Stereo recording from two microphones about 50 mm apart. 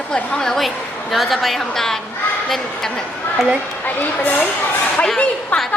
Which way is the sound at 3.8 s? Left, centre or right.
Left.